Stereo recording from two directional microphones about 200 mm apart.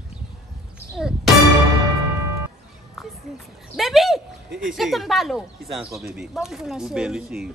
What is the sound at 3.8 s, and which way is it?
Speech, centre (ahead or behind).